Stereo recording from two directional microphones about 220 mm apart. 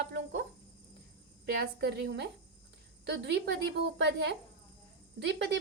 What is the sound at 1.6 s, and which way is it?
A woman's voice, 45° right (ahead or behind).